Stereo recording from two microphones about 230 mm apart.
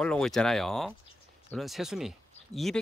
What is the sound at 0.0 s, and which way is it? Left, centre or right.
Speech, centre.